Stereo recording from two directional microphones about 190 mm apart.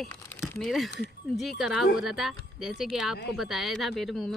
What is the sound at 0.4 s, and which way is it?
Speech, centre (ahead or behind).